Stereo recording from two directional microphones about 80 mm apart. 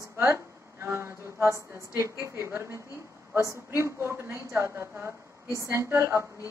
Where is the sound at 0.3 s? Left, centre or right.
Right.